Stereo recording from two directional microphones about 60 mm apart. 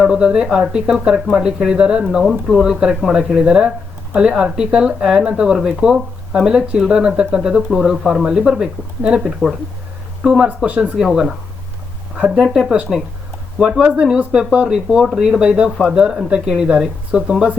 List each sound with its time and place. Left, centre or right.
0.0 s speech: centre
9.2 s speech: centre
10.2 s speech: centre
12.4 s speech: centre